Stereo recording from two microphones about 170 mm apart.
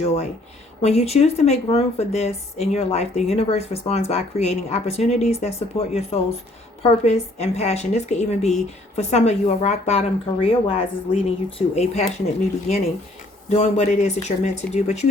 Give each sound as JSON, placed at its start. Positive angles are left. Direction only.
{"t": 0.0, "sound": "a woman's voice", "side_deg": 40}